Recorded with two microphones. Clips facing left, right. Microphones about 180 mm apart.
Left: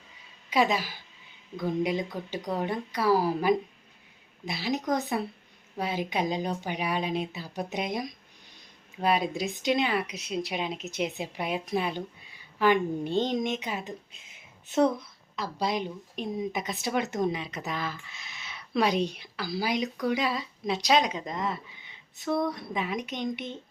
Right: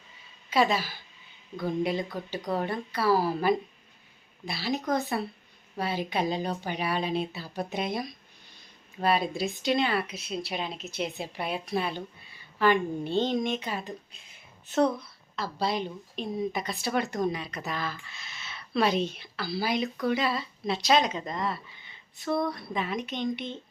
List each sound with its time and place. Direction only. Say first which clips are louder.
0.5 s speech: even; 15° left (ahead or behind)
15.4 s speech: even; 15° left (ahead or behind)
22.2 s speech: even; centre (ahead or behind)
22.5 s speech: even; 15° left (ahead or behind)